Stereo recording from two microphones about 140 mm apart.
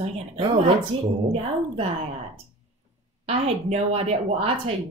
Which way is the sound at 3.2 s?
50° right (ahead or behind).